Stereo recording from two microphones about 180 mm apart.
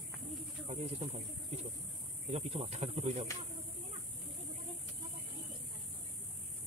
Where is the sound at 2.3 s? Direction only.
35° right (ahead or behind).